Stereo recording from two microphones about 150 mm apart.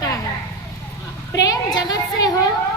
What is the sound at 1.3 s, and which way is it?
A woman's voice, 25° left (ahead or behind).